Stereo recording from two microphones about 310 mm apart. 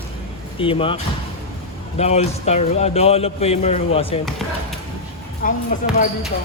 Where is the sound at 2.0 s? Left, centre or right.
Centre.